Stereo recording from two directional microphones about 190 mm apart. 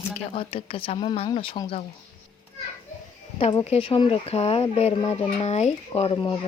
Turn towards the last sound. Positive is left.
turn(degrees=25)  # may be behind; listen again after turning